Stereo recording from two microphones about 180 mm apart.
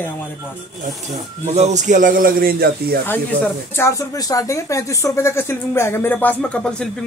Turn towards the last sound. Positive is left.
turn(degrees=5)  # may be behind; listen again after turning